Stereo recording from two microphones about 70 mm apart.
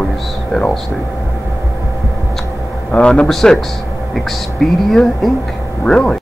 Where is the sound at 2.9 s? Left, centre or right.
Centre.